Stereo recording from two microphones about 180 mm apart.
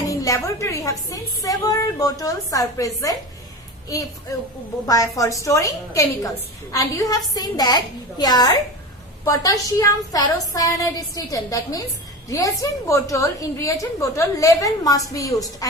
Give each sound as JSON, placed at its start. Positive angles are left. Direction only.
{"t": 0.0, "sound": "a woman's voice", "side_deg": 20}
{"t": 12.9, "sound": "a woman's voice", "side_deg": 15}